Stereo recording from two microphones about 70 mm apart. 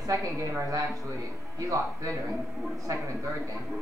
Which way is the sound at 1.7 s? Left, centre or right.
Right.